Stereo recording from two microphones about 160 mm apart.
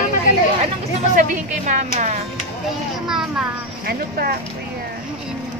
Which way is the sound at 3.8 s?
70° right (ahead or behind).